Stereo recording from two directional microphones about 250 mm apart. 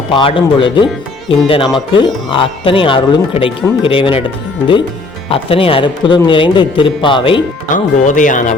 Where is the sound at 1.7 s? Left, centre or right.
Centre.